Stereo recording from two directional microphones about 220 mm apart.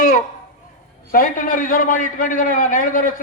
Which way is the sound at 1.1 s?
40° left (ahead or behind).